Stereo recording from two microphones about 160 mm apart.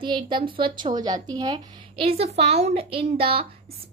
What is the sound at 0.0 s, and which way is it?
A woman's voice, 30° right (ahead or behind).